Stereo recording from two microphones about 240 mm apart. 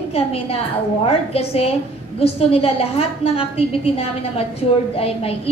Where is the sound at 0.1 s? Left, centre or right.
Left.